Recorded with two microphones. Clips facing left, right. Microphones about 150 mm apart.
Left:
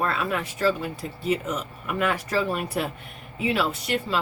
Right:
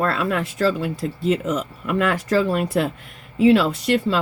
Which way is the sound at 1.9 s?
90° right.